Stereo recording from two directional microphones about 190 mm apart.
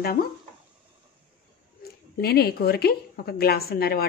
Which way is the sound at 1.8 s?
55° left (ahead or behind).